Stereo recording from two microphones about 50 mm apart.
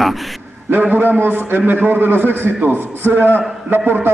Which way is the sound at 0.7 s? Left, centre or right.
Right.